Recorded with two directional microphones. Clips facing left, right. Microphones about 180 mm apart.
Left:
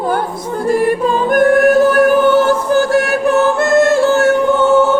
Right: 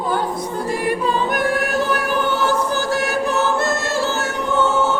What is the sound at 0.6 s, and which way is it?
Music, 50° left (ahead or behind).